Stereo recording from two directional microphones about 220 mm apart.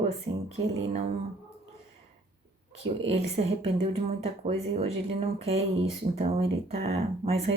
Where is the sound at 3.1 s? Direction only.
30° right (ahead or behind).